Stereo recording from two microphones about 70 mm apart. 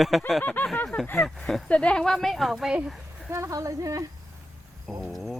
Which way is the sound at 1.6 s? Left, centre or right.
Centre.